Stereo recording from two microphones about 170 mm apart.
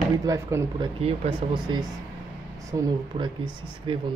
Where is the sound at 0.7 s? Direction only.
30° right (ahead or behind).